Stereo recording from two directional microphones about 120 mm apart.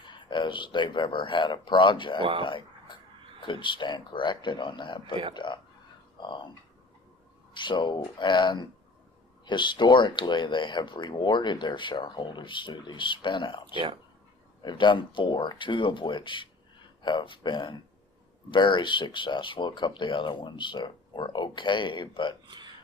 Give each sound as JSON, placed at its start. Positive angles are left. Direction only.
{"t": 0.0, "sound": "speech", "side_deg": 40}
{"t": 7.5, "sound": "speech", "side_deg": 40}
{"t": 13.7, "sound": "speech", "side_deg": -45}
{"t": 14.6, "sound": "speech", "side_deg": 40}
{"t": 22.4, "sound": "a sound", "side_deg": -40}